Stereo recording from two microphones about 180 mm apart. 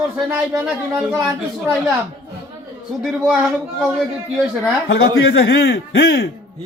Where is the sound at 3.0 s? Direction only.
5° right (ahead or behind).